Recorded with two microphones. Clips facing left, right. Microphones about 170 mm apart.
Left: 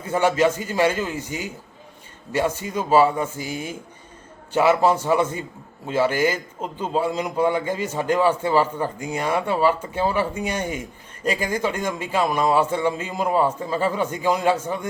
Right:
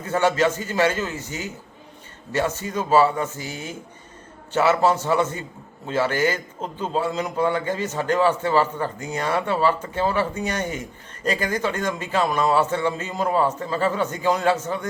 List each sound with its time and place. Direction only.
0.0 s a man's voice: 10° left (ahead or behind)